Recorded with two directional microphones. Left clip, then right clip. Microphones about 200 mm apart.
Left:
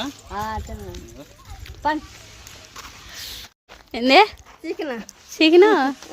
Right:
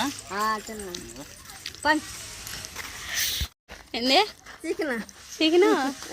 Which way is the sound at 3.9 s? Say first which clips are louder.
Left 8 dB; 40° left (ahead or behind).